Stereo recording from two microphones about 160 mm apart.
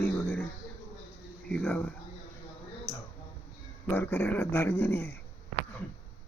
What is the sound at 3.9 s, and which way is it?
Speech, 10° left (ahead or behind).